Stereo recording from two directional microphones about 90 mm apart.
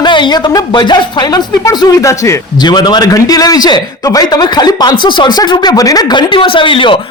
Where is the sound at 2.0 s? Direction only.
30° left (ahead or behind).